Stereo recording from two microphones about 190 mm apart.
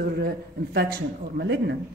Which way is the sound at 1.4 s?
65° right (ahead or behind).